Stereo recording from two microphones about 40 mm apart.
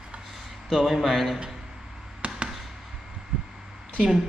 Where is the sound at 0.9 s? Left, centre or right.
Centre.